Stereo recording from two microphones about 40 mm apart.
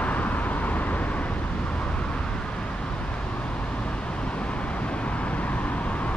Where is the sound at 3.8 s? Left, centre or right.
Left.